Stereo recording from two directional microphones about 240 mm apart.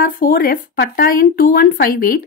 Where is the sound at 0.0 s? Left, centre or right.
Left.